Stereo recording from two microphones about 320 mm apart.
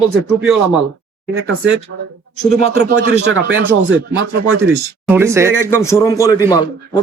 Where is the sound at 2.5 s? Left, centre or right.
Centre.